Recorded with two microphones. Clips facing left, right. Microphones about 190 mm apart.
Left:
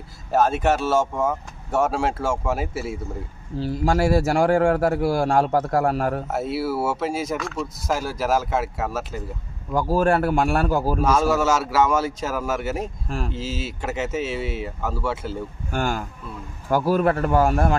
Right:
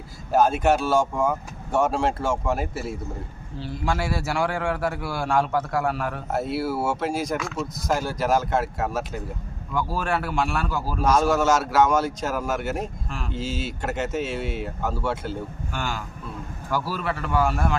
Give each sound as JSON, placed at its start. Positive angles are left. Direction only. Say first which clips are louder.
{"t": 0.3, "sound": "speech", "louder": "even", "side_deg": 0}
{"t": 3.5, "sound": "a man's voice", "louder": "left 6 dB", "side_deg": 40}
{"t": 6.3, "sound": "speech", "louder": "left 1 dB", "side_deg": 5}
{"t": 9.7, "sound": "a man's voice", "louder": "left 7 dB", "side_deg": 40}
{"t": 11.1, "sound": "speech", "louder": "right 2 dB", "side_deg": 5}
{"t": 15.7, "sound": "a man's voice", "louder": "left 8 dB", "side_deg": 50}